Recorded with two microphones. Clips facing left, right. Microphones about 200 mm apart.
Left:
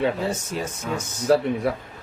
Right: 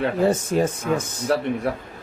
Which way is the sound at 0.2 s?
55° right (ahead or behind).